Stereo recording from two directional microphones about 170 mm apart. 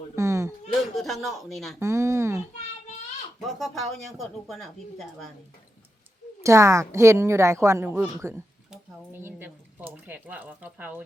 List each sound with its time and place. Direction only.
0.2 s a sound: 15° right (ahead or behind)
0.9 s speech: centre (ahead or behind)
1.8 s a woman's voice: 15° right (ahead or behind)
3.4 s speech: centre (ahead or behind)
6.4 s a woman's voice: 15° right (ahead or behind)